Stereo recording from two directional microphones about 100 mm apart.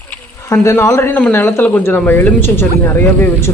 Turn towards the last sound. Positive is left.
turn(degrees=25)  # may be behind; listen again after turning